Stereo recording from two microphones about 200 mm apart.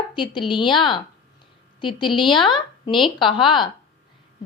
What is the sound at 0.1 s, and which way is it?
A woman's voice, 25° left (ahead or behind).